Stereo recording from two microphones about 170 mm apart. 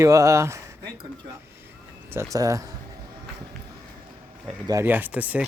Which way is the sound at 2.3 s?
20° right (ahead or behind).